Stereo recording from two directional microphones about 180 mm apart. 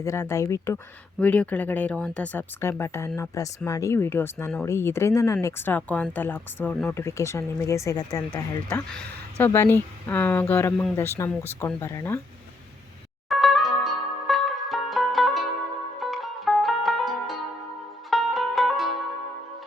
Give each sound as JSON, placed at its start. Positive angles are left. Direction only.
{"t": 0.0, "sound": "speech", "side_deg": 15}
{"t": 8.9, "sound": "speech", "side_deg": 10}
{"t": 13.2, "sound": "music", "side_deg": 0}